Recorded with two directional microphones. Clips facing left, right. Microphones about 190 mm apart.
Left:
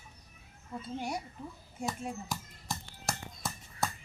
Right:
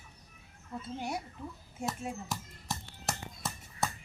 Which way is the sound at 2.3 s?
Centre (ahead or behind).